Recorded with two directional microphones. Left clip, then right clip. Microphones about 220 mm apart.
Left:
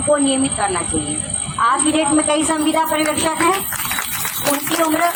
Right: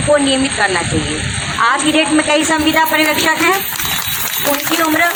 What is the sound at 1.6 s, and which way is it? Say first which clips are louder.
A woman's voice: right 3 dB; 55° left (ahead or behind).